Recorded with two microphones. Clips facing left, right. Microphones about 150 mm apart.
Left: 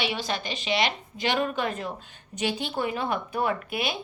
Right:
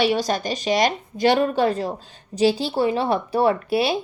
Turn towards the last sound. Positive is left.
turn(degrees=-35)  # may be behind; listen again after turning